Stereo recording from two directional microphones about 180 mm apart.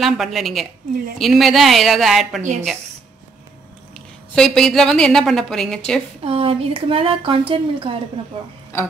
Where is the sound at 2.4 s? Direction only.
40° right (ahead or behind).